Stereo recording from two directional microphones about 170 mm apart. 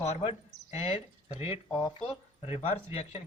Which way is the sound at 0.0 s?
30° left (ahead or behind).